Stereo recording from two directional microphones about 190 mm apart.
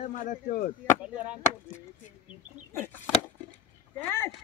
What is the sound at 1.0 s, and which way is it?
Speech, 5° right (ahead or behind).